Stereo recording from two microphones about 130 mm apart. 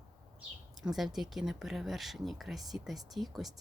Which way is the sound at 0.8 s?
Centre (ahead or behind).